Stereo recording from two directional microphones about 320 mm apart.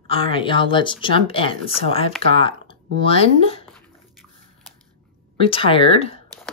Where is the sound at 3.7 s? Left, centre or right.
Centre.